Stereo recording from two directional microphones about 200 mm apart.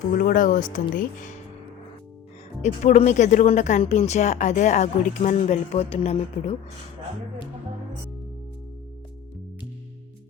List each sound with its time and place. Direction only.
0.2 s speech: 45° left (ahead or behind)
2.6 s speech: 35° left (ahead or behind)